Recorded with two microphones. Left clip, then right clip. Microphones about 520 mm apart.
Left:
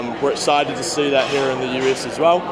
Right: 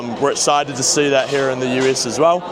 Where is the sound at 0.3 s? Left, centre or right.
Right.